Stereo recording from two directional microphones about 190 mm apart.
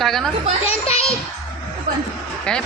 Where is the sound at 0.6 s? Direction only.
30° left (ahead or behind).